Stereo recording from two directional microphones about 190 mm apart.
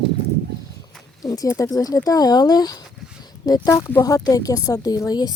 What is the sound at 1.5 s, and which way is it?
Speech, 15° left (ahead or behind).